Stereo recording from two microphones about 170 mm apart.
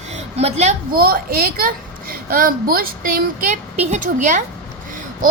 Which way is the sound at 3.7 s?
45° right (ahead or behind).